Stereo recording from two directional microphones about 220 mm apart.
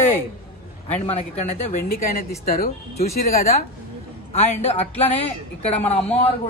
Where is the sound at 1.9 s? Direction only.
40° left (ahead or behind).